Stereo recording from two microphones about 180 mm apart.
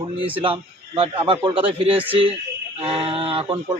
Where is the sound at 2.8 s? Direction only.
30° right (ahead or behind).